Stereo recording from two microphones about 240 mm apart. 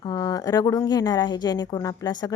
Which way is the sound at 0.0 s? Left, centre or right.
Centre.